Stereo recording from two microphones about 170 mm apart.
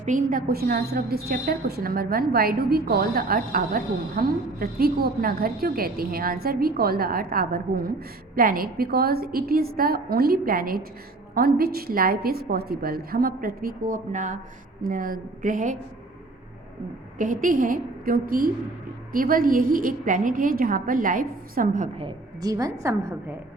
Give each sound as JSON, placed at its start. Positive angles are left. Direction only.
{"t": 0.0, "sound": "a woman's voice", "side_deg": -50}
{"t": 17.2, "sound": "a woman's voice", "side_deg": -50}
{"t": 22.4, "sound": "a woman's voice", "side_deg": -20}